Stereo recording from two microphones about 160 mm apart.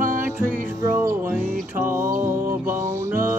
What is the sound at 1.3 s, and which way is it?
Music, 15° right (ahead or behind).